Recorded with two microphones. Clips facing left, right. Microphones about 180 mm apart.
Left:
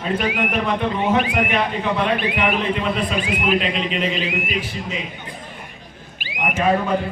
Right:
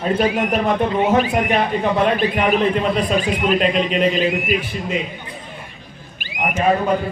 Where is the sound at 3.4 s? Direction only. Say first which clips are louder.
Right 3 dB; 45° right (ahead or behind).